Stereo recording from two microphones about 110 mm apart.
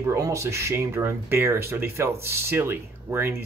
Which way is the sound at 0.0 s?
25° right (ahead or behind).